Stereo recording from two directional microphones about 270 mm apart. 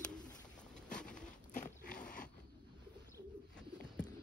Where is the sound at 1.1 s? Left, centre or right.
Left.